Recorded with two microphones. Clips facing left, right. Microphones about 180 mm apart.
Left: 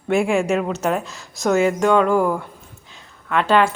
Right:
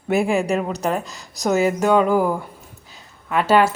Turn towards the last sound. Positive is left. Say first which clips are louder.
# right 1 dB
turn(degrees=-5)  # may be behind; listen again after turning